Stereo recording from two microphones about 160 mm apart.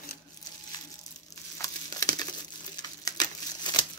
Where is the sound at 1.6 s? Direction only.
25° left (ahead or behind).